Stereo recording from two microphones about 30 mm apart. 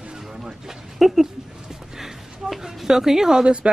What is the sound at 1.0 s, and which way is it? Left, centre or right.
Speech, centre.